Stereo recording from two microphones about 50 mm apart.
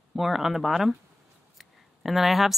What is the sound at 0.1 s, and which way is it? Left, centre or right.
Speech, centre.